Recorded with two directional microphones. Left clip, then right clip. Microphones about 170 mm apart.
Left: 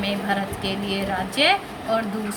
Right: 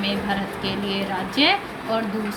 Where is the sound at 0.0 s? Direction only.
55° left (ahead or behind).